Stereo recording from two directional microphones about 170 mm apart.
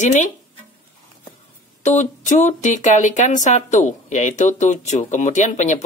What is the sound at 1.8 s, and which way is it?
Speech, 45° left (ahead or behind).